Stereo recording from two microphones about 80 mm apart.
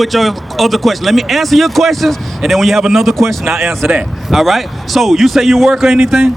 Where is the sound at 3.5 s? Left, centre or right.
Right.